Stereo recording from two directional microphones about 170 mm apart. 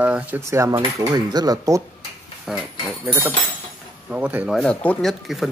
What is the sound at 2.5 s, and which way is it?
Speech, centre (ahead or behind).